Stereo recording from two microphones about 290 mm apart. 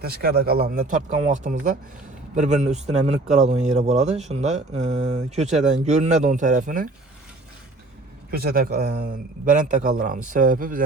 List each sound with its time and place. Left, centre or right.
0.0 s speech: right
8.3 s speech: right